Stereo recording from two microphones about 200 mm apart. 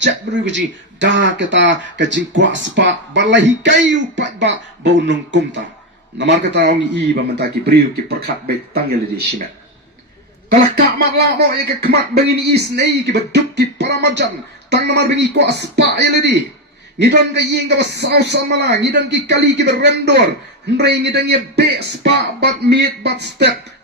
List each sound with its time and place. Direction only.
0.0 s speech: 65° right (ahead or behind)
10.8 s speech: 50° right (ahead or behind)